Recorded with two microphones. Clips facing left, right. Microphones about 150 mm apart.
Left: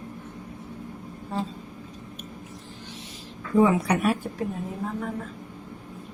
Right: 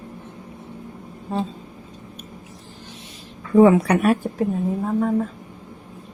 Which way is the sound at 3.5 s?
60° right (ahead or behind).